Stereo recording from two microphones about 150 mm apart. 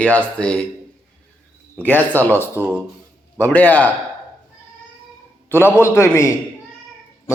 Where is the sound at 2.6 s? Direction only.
10° right (ahead or behind).